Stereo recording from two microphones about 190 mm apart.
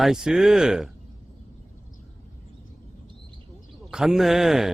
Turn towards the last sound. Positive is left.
turn(degrees=0)  # may be behind; listen again after turning